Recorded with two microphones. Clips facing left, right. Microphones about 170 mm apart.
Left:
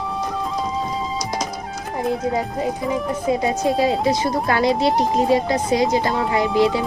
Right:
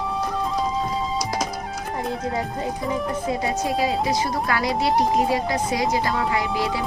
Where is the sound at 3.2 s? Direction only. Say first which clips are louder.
Left 7 dB; 25° left (ahead or behind).